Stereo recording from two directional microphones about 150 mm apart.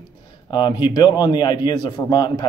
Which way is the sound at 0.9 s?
30° left (ahead or behind).